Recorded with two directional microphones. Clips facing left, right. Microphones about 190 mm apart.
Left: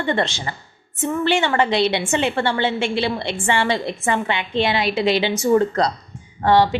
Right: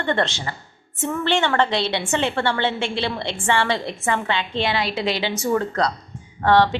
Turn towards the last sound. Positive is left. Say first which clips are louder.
# left 1 dB
turn(degrees=10)  # may be behind; listen again after turning